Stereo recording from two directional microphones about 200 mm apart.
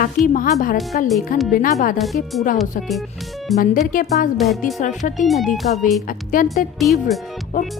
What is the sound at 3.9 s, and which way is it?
Speech, 40° left (ahead or behind).